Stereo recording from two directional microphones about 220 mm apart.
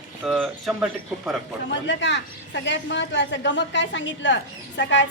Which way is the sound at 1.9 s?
55° left (ahead or behind).